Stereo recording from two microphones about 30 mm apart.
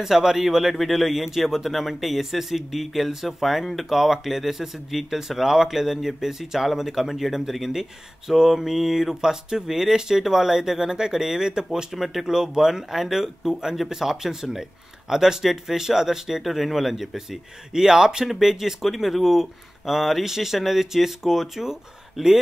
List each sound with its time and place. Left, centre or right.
0.0 s speech: centre
0.7 s speech: centre
16.4 s speech: centre